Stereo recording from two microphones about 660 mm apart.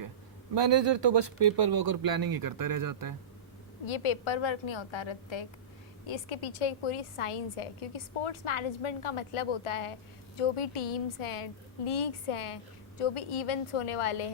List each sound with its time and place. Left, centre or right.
0.5 s speech: right
3.8 s a woman's voice: left